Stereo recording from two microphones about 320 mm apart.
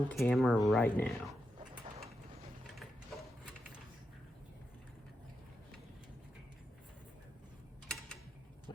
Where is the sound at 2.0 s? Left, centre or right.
Centre.